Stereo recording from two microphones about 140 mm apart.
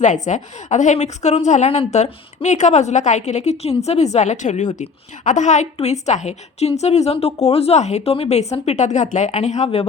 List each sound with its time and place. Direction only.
0.0 s a woman's voice: 60° left (ahead or behind)